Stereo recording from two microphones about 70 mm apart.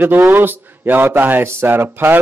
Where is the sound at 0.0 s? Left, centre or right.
Right.